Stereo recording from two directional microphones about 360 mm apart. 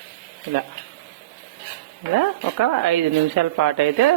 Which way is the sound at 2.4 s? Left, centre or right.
Right.